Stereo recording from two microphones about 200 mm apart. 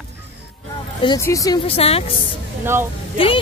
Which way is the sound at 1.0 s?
15° left (ahead or behind).